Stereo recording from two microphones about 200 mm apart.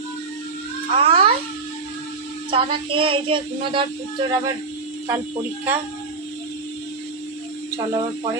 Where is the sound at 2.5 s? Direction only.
25° right (ahead or behind).